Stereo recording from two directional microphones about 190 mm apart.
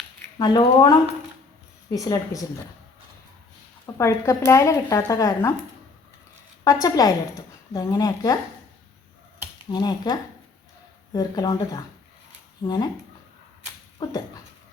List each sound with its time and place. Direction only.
0.3 s a woman's voice: 20° left (ahead or behind)
3.9 s speech: 15° left (ahead or behind)
6.8 s a woman's voice: 20° left (ahead or behind)
9.6 s a woman's voice: 20° left (ahead or behind)
14.0 s a woman's voice: 20° left (ahead or behind)